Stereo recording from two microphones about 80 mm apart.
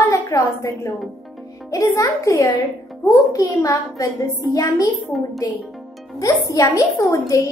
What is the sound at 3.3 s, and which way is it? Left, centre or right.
A woman's voice, left.